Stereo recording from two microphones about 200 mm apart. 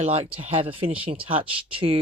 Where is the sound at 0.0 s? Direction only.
30° right (ahead or behind).